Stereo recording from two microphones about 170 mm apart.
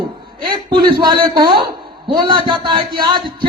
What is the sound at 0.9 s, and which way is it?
A man's voice, 25° right (ahead or behind).